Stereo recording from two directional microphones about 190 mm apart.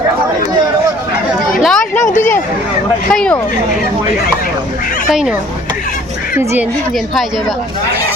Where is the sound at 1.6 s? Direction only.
5° left (ahead or behind).